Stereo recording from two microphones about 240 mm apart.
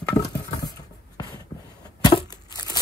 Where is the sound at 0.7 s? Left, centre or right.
Centre.